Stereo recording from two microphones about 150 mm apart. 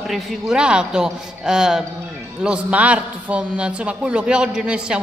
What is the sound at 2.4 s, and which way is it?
A man's voice, 10° right (ahead or behind).